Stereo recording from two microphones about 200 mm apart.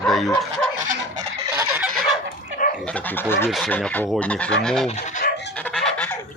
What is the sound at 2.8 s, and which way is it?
Bird, 5° left (ahead or behind).